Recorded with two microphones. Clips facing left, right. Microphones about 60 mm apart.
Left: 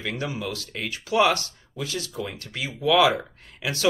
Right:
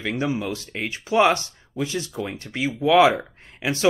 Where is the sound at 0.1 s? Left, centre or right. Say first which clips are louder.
Right 7 dB; right.